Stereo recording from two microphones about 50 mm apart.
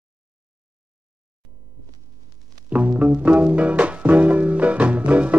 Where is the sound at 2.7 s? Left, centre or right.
Right.